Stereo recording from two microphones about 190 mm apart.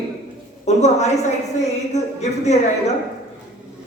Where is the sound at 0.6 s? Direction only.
35° left (ahead or behind).